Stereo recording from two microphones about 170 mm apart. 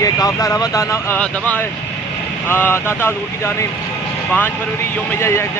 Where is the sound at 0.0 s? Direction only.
20° left (ahead or behind).